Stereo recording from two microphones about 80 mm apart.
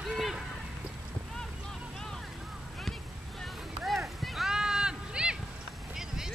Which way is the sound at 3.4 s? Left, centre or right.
Centre.